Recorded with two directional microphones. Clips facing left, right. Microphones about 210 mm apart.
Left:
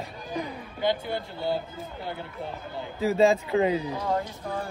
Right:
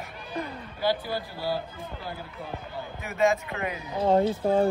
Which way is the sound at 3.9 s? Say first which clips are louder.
Right 7 dB; 30° right (ahead or behind).